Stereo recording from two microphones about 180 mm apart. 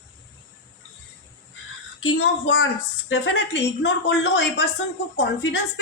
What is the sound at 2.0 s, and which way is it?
A woman's voice, 90° left.